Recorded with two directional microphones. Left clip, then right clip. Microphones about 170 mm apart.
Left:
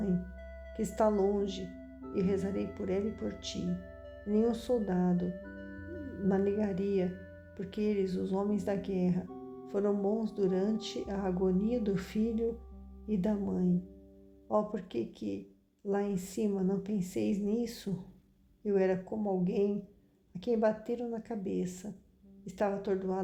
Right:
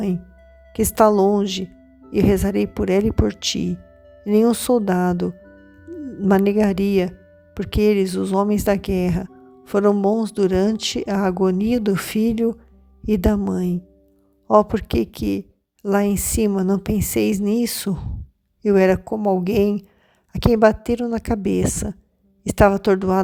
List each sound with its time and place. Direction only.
0.7 s a woman's voice: 50° right (ahead or behind)
3.7 s music: centre (ahead or behind)
4.3 s a woman's voice: 55° right (ahead or behind)
5.4 s music: centre (ahead or behind)
6.2 s a woman's voice: 55° right (ahead or behind)